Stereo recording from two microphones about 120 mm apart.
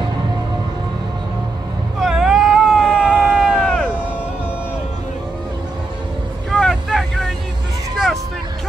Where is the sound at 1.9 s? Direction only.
5° right (ahead or behind).